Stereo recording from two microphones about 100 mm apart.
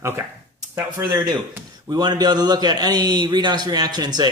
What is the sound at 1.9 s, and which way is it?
A man's voice, 45° right (ahead or behind).